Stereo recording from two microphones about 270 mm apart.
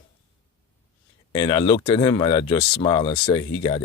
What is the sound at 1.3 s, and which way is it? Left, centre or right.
Speech, centre.